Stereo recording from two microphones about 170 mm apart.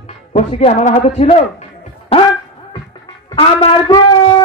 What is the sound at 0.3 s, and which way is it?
A man's voice, 40° left (ahead or behind).